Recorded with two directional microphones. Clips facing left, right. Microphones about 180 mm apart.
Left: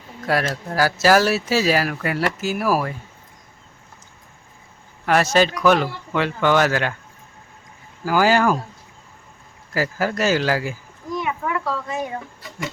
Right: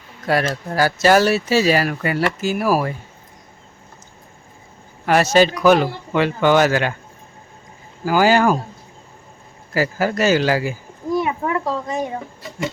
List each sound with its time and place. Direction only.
0.3 s speech: centre (ahead or behind)
5.0 s speech: centre (ahead or behind)
8.0 s speech: centre (ahead or behind)
9.7 s speech: centre (ahead or behind)
11.2 s a sound: 30° right (ahead or behind)
12.1 s speech: 25° right (ahead or behind)